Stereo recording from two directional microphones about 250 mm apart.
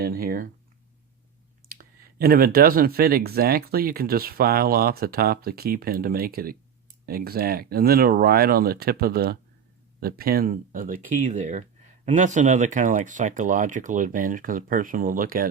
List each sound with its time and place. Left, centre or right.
0.0 s speech: right
1.7 s speech: right